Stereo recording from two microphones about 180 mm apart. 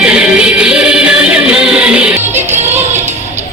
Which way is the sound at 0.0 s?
5° right (ahead or behind).